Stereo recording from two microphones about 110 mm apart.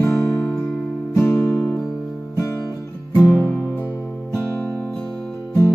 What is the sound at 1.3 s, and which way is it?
Music, 10° left (ahead or behind).